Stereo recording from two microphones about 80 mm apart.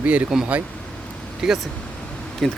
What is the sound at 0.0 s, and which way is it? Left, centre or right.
Speech, centre.